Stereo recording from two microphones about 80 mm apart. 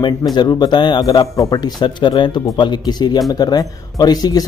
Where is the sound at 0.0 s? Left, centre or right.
Left.